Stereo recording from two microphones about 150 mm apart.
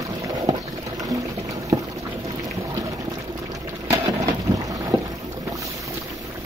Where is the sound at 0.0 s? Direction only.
20° right (ahead or behind).